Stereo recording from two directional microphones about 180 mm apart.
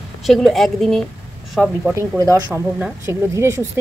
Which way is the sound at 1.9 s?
15° right (ahead or behind).